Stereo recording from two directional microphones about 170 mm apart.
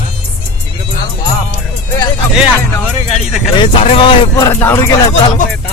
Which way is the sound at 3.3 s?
Centre (ahead or behind).